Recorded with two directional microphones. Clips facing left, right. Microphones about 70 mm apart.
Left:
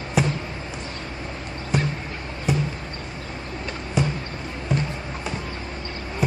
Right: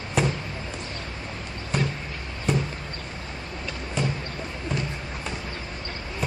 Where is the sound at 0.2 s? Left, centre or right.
Centre.